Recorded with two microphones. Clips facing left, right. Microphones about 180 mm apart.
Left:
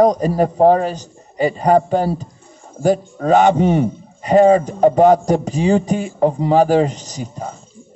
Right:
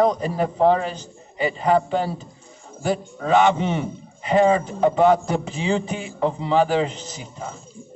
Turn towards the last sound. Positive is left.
turn(degrees=45)  # may be behind; listen again after turning